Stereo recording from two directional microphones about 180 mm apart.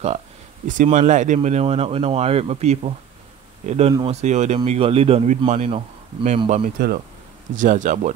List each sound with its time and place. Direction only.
0.7 s speech: 45° right (ahead or behind)
6.6 s speech: 60° right (ahead or behind)
7.5 s speech: 45° right (ahead or behind)